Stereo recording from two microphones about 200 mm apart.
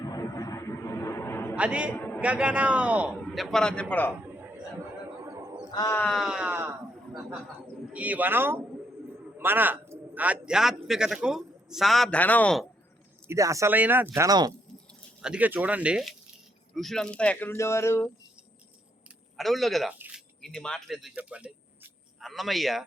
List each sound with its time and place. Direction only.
0.0 s a sound: 15° left (ahead or behind)
1.5 s a man's voice: 5° right (ahead or behind)
2.0 s a sound: 10° left (ahead or behind)
2.2 s a man's voice: 5° right (ahead or behind)
4.4 s a sound: 10° right (ahead or behind)
5.7 s speech: 15° left (ahead or behind)
6.1 s a man's voice: centre (ahead or behind)
13.2 s speech: 15° right (ahead or behind)
15.2 s a man's voice: 5° right (ahead or behind); by 18.1 s 15° left (ahead or behind)
19.4 s a man's voice: centre (ahead or behind)